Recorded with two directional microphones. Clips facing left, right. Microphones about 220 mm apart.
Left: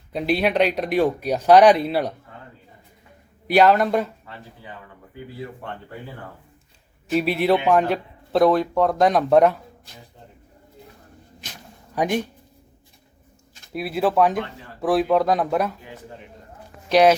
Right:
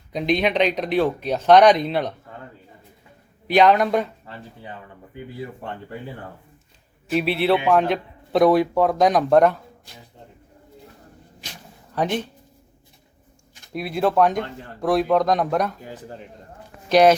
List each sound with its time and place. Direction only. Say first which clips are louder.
0.1 s speech: even; 5° left (ahead or behind)
3.4 s a man's voice: even; 5° left (ahead or behind)
7.1 s a man's voice: even; 10° left (ahead or behind)
11.9 s speech: left 1 dB; 10° left (ahead or behind)
13.7 s a man's voice: even; 5° left (ahead or behind)
15.8 s a man's voice: right 3 dB; 35° right (ahead or behind)
16.9 s a man's voice: right 1 dB; 5° left (ahead or behind)